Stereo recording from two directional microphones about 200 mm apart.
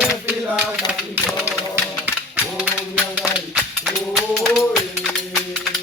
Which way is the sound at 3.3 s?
Centre (ahead or behind).